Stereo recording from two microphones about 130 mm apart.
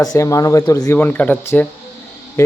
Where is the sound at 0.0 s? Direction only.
25° left (ahead or behind).